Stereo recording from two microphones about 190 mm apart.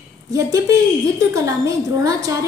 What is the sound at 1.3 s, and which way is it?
A woman's voice, 15° right (ahead or behind).